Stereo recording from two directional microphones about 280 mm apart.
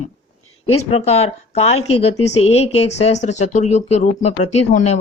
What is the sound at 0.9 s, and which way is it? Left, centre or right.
Speech, left.